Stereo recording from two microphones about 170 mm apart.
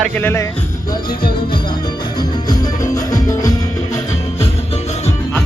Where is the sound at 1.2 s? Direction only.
30° left (ahead or behind).